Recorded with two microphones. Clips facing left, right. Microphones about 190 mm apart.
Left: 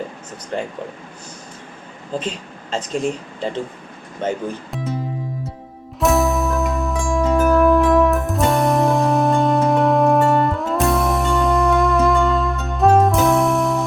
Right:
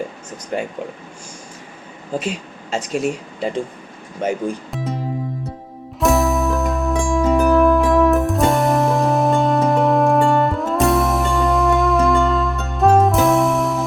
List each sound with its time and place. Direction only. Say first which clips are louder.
0.5 s speech: right 1 dB; 10° right (ahead or behind)
2.1 s speech: right 2 dB; 10° right (ahead or behind)
6.0 s music: even; centre (ahead or behind)